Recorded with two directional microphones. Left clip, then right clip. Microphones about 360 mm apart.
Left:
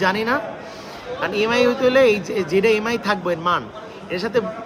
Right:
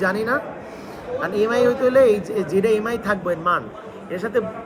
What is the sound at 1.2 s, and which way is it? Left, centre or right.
A man's voice, left.